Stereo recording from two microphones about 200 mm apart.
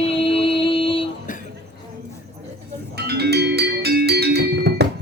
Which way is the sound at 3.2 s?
55° right (ahead or behind).